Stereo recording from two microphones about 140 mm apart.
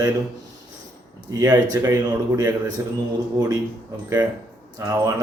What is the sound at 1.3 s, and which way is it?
Speech, 25° right (ahead or behind).